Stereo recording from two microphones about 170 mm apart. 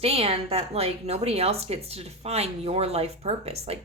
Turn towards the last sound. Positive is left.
turn(degrees=-35)  # may be behind; listen again after turning